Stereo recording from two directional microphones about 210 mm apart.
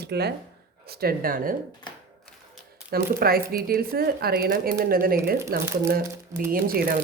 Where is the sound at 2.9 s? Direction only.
45° right (ahead or behind).